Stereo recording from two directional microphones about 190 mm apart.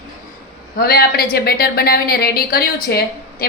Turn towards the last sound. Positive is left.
turn(degrees=50)  # may be behind; listen again after turning